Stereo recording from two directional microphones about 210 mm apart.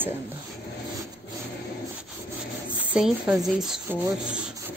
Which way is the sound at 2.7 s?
5° right (ahead or behind).